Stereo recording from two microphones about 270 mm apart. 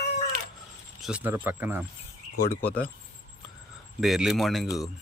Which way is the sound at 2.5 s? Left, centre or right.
Centre.